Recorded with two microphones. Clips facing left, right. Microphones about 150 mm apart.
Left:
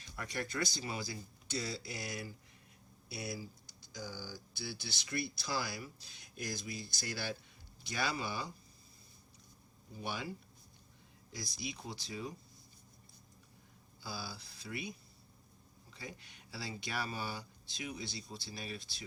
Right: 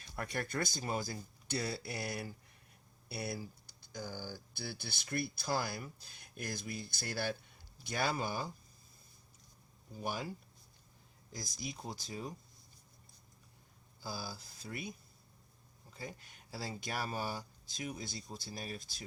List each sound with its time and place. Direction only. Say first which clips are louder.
0.2 s speech: right 1 dB; 55° right (ahead or behind)
10.0 s speech: right 2 dB; 40° right (ahead or behind)
11.3 s speech: even; 45° right (ahead or behind)
14.0 s speech: right 1 dB; 45° right (ahead or behind)